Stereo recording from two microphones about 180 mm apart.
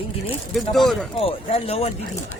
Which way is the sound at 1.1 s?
35° left (ahead or behind).